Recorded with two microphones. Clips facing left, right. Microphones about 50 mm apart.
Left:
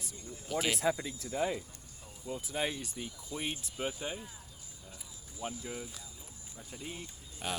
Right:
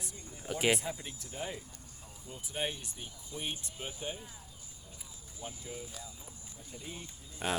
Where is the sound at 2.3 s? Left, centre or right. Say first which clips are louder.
Left 9 dB; left.